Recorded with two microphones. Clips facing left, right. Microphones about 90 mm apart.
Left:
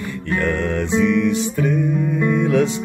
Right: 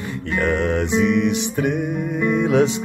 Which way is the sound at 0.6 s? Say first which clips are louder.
Even; 20° right (ahead or behind).